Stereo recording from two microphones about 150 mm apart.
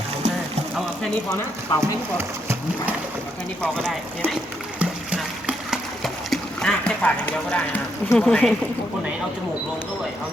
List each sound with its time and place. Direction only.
1.8 s speech: 15° right (ahead or behind)
3.6 s speech: 5° left (ahead or behind)
4.8 s splash: 5° right (ahead or behind); by 7.8 s 10° left (ahead or behind)
8.1 s speech: 5° left (ahead or behind)